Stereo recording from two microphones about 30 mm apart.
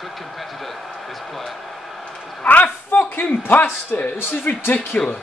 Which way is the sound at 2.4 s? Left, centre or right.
Left.